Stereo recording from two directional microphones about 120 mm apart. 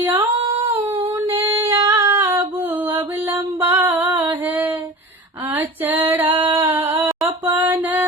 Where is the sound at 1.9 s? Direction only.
20° right (ahead or behind).